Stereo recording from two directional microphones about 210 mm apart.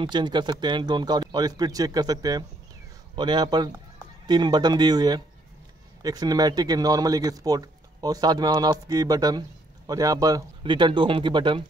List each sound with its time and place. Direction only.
0.0 s speech: 20° right (ahead or behind)